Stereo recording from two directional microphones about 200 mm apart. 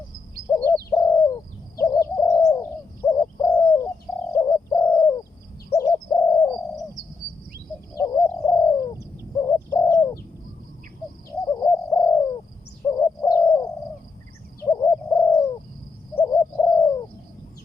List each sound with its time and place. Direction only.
0.5 s bird: 10° left (ahead or behind)
7.9 s bird: 15° left (ahead or behind)
11.3 s bird: 15° left (ahead or behind)